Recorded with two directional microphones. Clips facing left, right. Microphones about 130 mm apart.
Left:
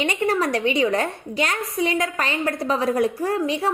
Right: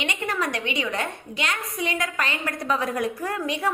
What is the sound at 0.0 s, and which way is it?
A woman's voice, 35° left (ahead or behind).